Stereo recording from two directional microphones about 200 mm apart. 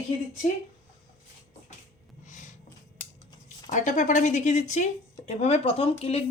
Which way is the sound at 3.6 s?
40° left (ahead or behind).